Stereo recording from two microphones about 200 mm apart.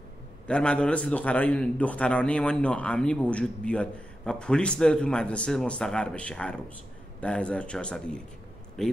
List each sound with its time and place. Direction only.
0.5 s a man's voice: 5° left (ahead or behind)